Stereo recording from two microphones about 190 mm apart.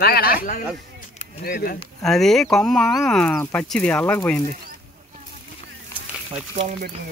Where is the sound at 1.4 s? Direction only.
50° left (ahead or behind).